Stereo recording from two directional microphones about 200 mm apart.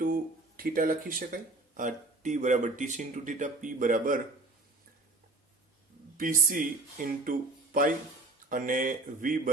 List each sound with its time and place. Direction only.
0.0 s speech: 45° right (ahead or behind)
6.1 s speech: 45° right (ahead or behind)